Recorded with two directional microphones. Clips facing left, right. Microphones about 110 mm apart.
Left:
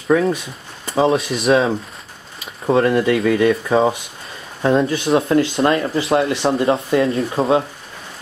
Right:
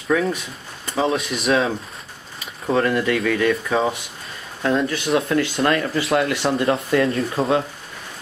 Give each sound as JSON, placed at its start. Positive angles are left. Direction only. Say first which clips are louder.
{"t": 0.1, "sound": "speech", "louder": "left 4 dB", "side_deg": 35}
{"t": 1.3, "sound": "speech", "louder": "left 4 dB", "side_deg": 0}
{"t": 2.6, "sound": "speech", "louder": "left 4 dB", "side_deg": 30}